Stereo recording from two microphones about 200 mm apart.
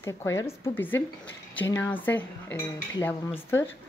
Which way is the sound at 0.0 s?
15° left (ahead or behind).